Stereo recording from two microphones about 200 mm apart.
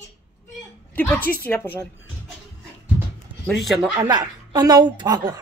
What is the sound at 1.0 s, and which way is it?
Speech, 10° left (ahead or behind).